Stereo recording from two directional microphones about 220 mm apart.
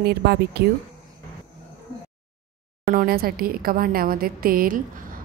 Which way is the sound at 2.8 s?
40° right (ahead or behind).